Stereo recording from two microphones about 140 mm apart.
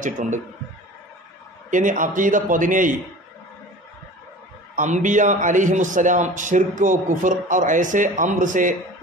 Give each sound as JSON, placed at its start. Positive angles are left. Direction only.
{"t": 0.0, "sound": "a man's voice", "side_deg": -60}
{"t": 1.7, "sound": "a man's voice", "side_deg": -65}
{"t": 4.7, "sound": "a man's voice", "side_deg": -60}